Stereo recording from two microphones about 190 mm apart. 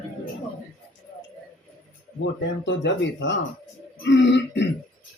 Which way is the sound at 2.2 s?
70° left (ahead or behind).